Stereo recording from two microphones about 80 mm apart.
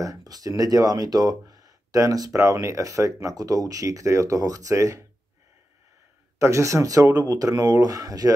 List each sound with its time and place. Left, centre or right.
0.0 s speech: right
6.4 s speech: right